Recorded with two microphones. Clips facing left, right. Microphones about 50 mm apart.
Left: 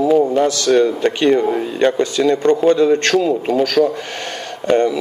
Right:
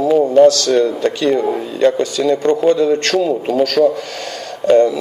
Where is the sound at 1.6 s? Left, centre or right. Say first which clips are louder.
Right 2 dB; left.